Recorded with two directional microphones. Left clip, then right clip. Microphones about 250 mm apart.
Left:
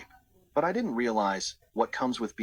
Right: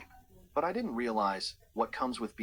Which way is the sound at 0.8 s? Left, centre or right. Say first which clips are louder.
Left 4 dB; centre.